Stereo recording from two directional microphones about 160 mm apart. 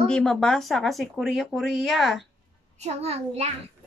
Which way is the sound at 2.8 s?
40° right (ahead or behind).